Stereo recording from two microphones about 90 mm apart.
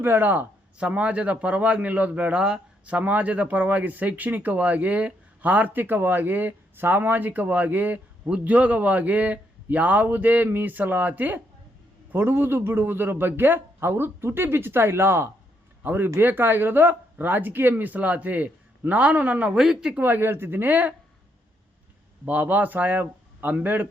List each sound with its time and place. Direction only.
0.0 s speech: 25° right (ahead or behind); by 20.0 s 5° right (ahead or behind)
20.0 s speech: 20° right (ahead or behind)
22.3 s speech: 20° right (ahead or behind)